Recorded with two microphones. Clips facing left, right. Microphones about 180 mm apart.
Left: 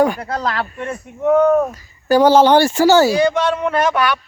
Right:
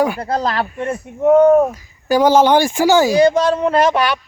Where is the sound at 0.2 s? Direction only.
35° right (ahead or behind).